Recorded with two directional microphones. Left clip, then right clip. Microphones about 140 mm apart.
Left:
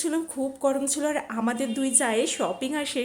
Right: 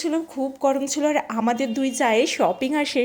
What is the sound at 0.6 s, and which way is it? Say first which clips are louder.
A woman's voice: right 4 dB; 20° right (ahead or behind).